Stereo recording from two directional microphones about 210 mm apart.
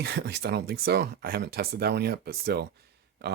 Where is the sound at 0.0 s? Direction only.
50° right (ahead or behind).